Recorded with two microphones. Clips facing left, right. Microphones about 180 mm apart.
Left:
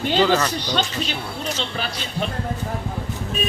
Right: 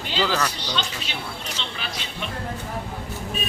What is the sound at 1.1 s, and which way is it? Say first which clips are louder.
Speech: left 5 dB; 40° left (ahead or behind).